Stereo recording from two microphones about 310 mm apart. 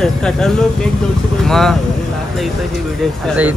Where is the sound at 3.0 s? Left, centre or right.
Centre.